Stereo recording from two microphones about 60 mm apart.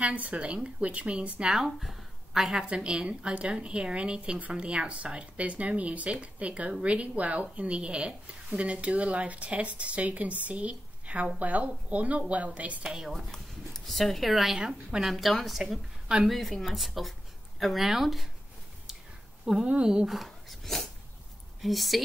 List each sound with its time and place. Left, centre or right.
0.0 s a woman's voice: right
1.4 s a woman's voice: centre
2.6 s a woman's voice: centre
12.8 s speech: centre
13.1 s speech: centre
19.4 s speech: centre
20.1 s dog: centre
21.5 s speech: centre